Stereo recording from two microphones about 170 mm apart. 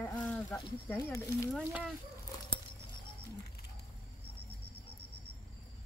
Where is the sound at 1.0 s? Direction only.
20° left (ahead or behind).